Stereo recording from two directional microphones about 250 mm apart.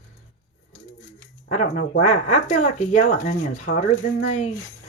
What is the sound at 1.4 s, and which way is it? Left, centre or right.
Speech, left.